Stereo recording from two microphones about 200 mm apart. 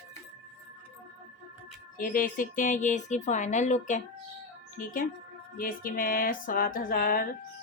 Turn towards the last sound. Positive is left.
turn(degrees=45)  # may be behind; listen again after turning